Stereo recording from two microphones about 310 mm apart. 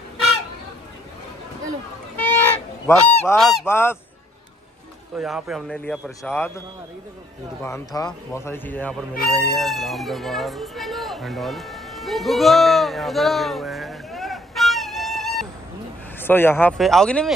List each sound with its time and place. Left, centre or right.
2.1 s goose: centre
3.2 s a man's voice: centre
5.1 s a man's voice: centre
7.6 s a man's voice: centre